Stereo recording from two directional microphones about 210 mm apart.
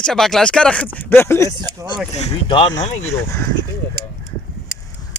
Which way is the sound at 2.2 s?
25° left (ahead or behind).